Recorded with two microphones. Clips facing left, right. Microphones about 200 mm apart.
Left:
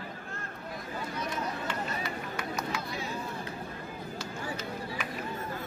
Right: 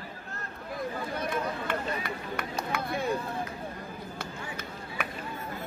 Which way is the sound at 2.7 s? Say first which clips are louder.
Right 5 dB; 55° right (ahead or behind).